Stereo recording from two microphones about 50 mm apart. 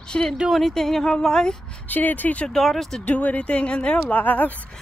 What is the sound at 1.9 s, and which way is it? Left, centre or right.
Speech, left.